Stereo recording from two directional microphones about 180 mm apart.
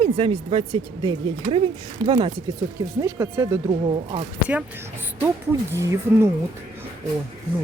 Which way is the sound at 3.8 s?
30° right (ahead or behind).